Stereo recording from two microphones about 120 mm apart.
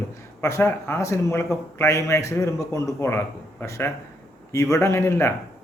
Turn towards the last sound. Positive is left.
turn(degrees=20)  # may be behind; listen again after turning